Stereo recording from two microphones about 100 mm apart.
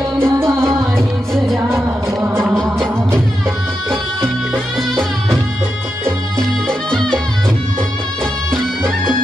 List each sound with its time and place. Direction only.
0.2 s music: 25° right (ahead or behind)
0.9 s music: 5° left (ahead or behind)
1.7 s music: 25° right (ahead or behind)
6.3 s music: 5° left (ahead or behind)